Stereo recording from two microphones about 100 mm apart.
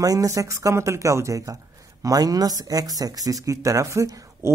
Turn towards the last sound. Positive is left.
turn(degrees=-30)  # may be behind; listen again after turning